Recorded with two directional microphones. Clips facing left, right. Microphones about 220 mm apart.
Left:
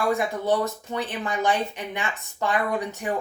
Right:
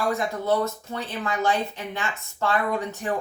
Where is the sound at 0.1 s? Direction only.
15° left (ahead or behind).